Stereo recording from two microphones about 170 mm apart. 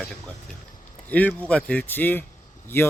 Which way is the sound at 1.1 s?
10° left (ahead or behind).